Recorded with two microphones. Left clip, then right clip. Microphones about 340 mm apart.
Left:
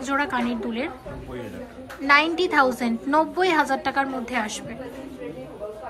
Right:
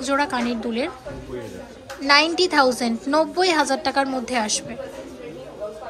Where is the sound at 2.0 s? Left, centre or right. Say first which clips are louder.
Right 2 dB; centre.